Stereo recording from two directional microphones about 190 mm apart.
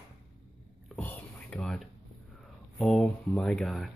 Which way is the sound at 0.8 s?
10° left (ahead or behind).